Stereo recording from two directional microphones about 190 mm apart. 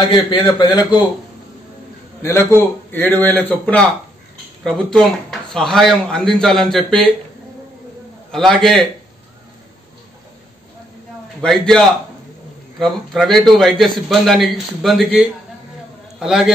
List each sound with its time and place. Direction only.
0.1 s a man's voice: 25° left (ahead or behind)
2.2 s a man's voice: 10° left (ahead or behind)
4.6 s a man's voice: centre (ahead or behind)
8.3 s a man's voice: centre (ahead or behind)
11.4 s a man's voice: centre (ahead or behind)